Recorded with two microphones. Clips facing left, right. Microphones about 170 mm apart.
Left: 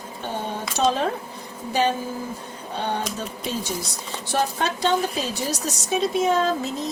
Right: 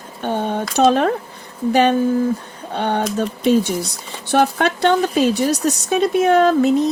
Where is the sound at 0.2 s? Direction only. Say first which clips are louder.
Right 9 dB; 65° right (ahead or behind).